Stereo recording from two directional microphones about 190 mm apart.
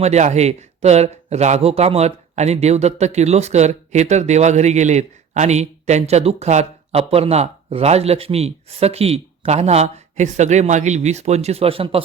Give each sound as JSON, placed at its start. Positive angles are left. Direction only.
{"t": 0.0, "sound": "speech", "side_deg": -35}